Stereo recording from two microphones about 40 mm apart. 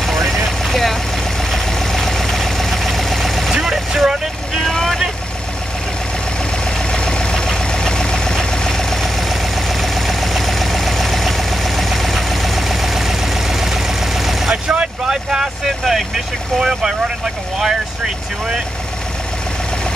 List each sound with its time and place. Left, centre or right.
0.0 s vehicle: centre
3.6 s vehicle: centre
4.6 s vehicle: centre
6.9 s vehicle: left
9.3 s vehicle: centre
14.5 s vehicle: right
15.0 s vehicle: centre
15.6 s speech: centre
16.5 s speech: centre